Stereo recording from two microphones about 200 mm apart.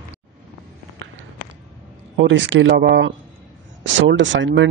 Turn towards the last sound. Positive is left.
turn(degrees=-70)  # may be behind; listen again after turning